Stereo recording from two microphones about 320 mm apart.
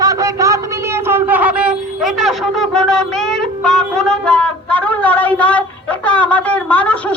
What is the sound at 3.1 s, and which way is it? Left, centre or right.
Music, centre.